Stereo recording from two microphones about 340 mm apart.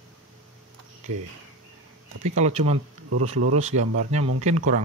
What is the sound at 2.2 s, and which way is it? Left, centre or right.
Mantra, centre.